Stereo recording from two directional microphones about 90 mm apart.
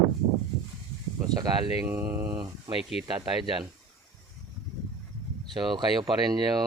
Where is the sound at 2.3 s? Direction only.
45° right (ahead or behind).